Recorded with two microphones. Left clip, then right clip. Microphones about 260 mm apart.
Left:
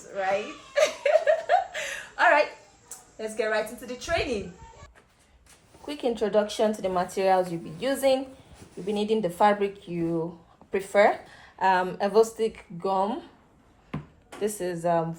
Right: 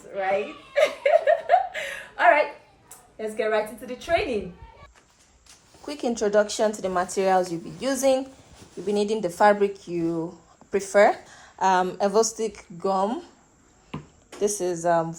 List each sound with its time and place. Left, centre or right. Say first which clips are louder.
0.1 s chuckle: right 2 dB; centre
3.2 s a woman's voice: right 2 dB; centre
5.9 s a woman's voice: right 2 dB; right
13.9 s a sound: even; centre
14.4 s a woman's voice: right 4 dB; right